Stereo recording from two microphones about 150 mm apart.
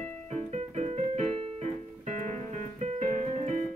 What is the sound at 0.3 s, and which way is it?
Keyboard, 50° right (ahead or behind).